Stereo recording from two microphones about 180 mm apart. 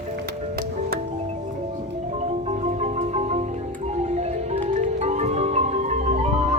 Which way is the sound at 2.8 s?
35° right (ahead or behind).